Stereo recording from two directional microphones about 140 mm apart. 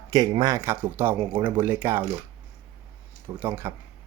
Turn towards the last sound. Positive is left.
turn(degrees=-15)  # may be behind; listen again after turning